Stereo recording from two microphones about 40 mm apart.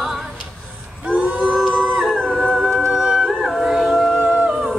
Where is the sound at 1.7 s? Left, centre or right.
Centre.